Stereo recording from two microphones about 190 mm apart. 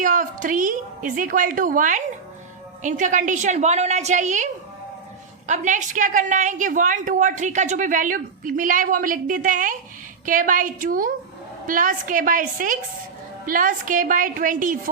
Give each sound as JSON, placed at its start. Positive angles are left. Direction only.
{"t": 0.0, "sound": "a woman's voice", "side_deg": -45}
{"t": 5.5, "sound": "a woman's voice", "side_deg": -40}